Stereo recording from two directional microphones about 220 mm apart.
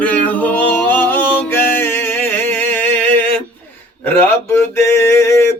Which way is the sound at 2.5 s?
10° left (ahead or behind).